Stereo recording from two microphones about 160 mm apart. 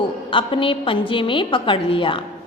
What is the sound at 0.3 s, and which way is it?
A woman's voice, 30° left (ahead or behind).